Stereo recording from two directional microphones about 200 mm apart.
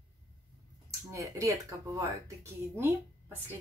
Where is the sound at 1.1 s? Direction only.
15° right (ahead or behind).